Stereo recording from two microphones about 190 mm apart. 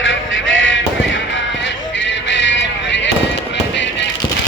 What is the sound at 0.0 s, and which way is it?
Music, 85° left.